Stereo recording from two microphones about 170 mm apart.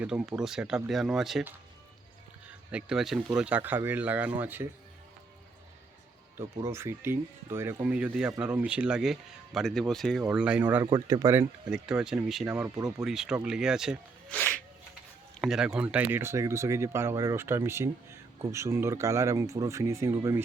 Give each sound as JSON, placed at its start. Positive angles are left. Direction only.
{"t": 0.0, "sound": "speech", "side_deg": -5}
{"t": 6.3, "sound": "speech", "side_deg": -15}
{"t": 10.8, "sound": "speech", "side_deg": -25}
{"t": 11.7, "sound": "speech", "side_deg": -5}
{"t": 14.3, "sound": "a sound", "side_deg": 5}
{"t": 15.4, "sound": "speech", "side_deg": -5}